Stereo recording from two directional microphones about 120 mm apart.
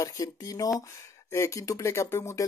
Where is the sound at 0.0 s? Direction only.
30° left (ahead or behind).